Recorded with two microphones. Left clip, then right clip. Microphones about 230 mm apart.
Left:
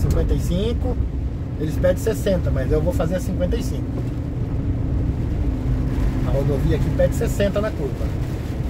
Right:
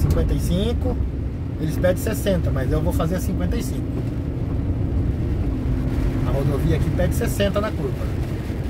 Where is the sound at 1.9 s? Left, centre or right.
Centre.